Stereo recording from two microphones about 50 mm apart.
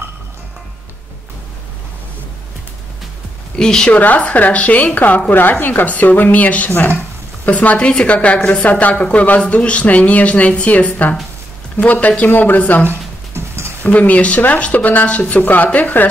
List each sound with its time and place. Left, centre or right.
3.5 s a woman's voice: centre
3.9 s speech: left
7.7 s a woman's voice: left